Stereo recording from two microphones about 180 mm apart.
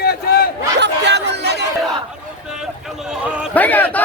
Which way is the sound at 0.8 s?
75° right (ahead or behind).